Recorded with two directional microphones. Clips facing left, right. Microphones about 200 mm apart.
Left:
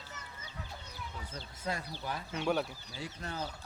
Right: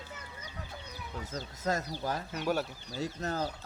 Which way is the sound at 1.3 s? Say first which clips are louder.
Right 6 dB; 45° right (ahead or behind).